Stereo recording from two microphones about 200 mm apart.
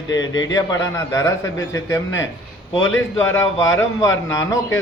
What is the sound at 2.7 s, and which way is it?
Speech, 80° left.